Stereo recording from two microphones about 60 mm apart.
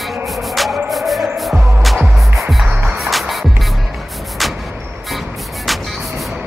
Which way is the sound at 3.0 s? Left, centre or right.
Centre.